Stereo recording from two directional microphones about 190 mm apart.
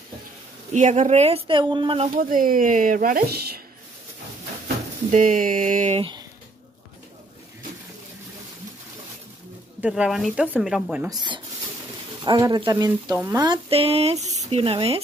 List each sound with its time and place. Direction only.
0.7 s speech: 40° right (ahead or behind)
2.1 s speech: 45° right (ahead or behind)
5.1 s speech: 45° right (ahead or behind)
9.8 s speech: 5° right (ahead or behind)
11.1 s speech: 25° right (ahead or behind)
13.5 s speech: 30° right (ahead or behind)